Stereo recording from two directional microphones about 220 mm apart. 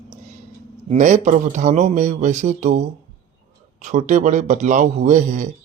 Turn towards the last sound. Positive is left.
turn(degrees=-35)  # may be behind; listen again after turning